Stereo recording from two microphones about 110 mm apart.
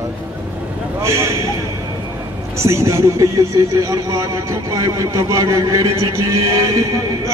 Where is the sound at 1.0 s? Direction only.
25° right (ahead or behind).